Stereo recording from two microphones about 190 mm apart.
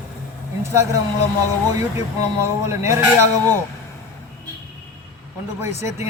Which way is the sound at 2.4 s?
15° right (ahead or behind).